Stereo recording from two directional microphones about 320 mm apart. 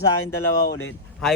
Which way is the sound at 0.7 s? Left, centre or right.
Left.